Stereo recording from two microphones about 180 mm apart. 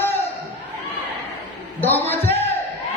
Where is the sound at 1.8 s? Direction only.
10° left (ahead or behind).